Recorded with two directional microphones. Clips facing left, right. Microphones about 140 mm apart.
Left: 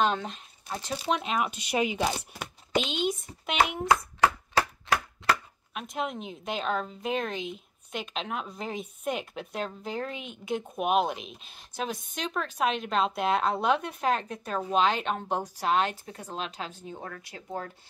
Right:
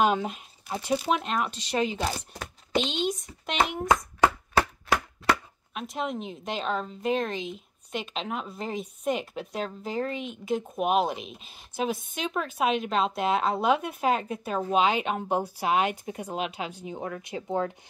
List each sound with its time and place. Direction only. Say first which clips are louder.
0.0 s speech: right 3 dB; 10° right (ahead or behind)
5.8 s speech: right 2 dB; centre (ahead or behind); by 17.6 s 20° right (ahead or behind)